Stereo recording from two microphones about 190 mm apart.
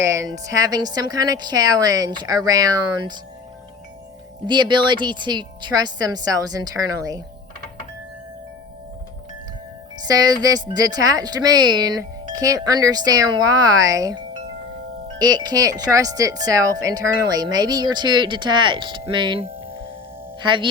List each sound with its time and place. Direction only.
0.0 s speech: 15° right (ahead or behind)
4.4 s speech: 25° right (ahead or behind)
10.0 s speech: 20° right (ahead or behind)
15.2 s speech: 20° right (ahead or behind)